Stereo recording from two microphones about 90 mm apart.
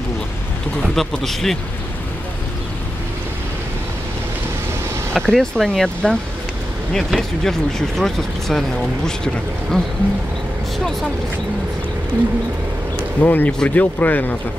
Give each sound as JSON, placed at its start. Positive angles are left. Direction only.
{"t": 0.9, "sound": "speech", "side_deg": 5}
{"t": 5.1, "sound": "speech", "side_deg": 5}
{"t": 13.2, "sound": "speech", "side_deg": 20}